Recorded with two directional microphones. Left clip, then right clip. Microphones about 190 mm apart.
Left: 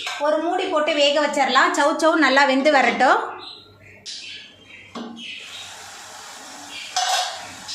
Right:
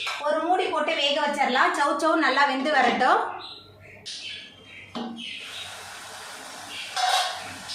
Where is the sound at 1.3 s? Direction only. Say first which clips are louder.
Left 5 dB; 45° left (ahead or behind).